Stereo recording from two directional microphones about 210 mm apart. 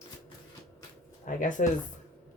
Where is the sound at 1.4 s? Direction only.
40° left (ahead or behind).